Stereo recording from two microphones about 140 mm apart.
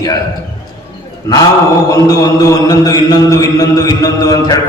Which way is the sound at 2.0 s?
25° left (ahead or behind).